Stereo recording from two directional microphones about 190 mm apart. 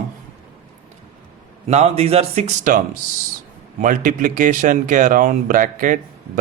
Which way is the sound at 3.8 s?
45° right (ahead or behind).